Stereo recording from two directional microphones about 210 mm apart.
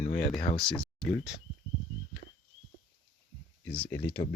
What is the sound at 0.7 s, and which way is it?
Speech, centre (ahead or behind).